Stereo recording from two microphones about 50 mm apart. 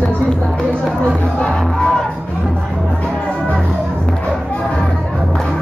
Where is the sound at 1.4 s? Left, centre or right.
Centre.